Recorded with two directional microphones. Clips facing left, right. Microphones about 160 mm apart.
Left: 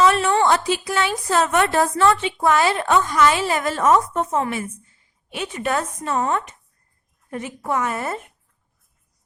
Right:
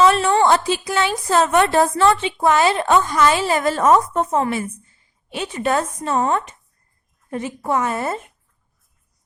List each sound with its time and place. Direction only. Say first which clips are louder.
0.0 s a woman's voice: right 2 dB; 30° right (ahead or behind)